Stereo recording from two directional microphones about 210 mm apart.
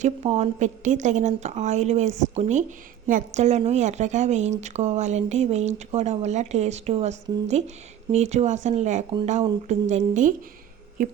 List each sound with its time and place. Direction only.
0.0 s a woman's voice: 30° right (ahead or behind)